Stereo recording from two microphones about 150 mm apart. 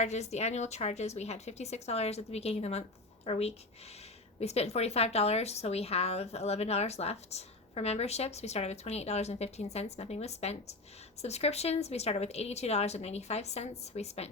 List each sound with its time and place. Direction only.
0.0 s speech: 50° left (ahead or behind)